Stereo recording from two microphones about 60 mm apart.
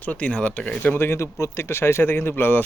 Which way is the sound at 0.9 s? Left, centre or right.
Left.